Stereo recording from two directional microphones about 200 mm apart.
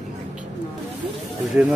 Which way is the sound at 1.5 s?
5° right (ahead or behind).